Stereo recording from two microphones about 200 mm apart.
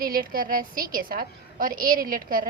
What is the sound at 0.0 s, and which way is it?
A woman's voice, 45° right (ahead or behind).